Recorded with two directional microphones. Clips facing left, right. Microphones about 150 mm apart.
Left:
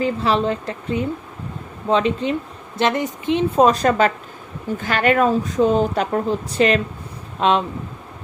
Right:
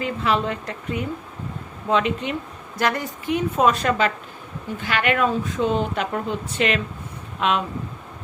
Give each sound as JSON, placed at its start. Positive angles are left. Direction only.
{"t": 0.0, "sound": "speech", "side_deg": 35}
{"t": 2.7, "sound": "speech", "side_deg": 20}